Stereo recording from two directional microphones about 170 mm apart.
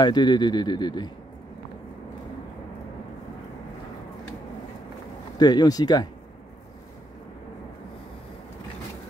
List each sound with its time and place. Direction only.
0.0 s speech: 25° left (ahead or behind)
5.4 s speech: 25° left (ahead or behind)